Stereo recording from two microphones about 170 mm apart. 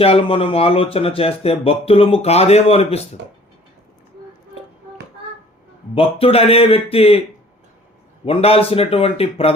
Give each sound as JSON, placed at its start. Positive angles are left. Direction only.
{"t": 0.0, "sound": "speech", "side_deg": 35}
{"t": 5.9, "sound": "speech", "side_deg": 35}